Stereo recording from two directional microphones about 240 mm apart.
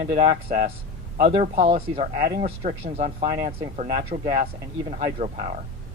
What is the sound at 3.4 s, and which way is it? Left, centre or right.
Speech, right.